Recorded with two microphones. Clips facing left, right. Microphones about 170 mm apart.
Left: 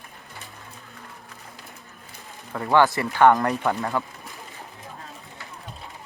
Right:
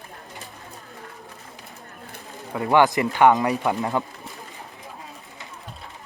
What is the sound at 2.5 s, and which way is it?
Speech, 15° right (ahead or behind).